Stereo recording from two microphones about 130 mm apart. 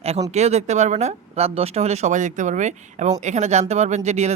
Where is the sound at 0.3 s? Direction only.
60° right (ahead or behind).